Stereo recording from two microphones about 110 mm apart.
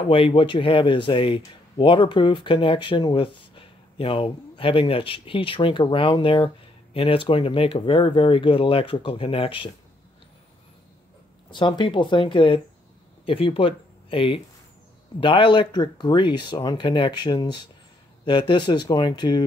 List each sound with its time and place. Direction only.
0.1 s speech: 55° left (ahead or behind)
11.5 s speech: 45° left (ahead or behind)